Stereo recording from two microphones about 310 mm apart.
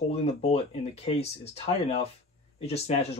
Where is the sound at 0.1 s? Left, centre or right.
Centre.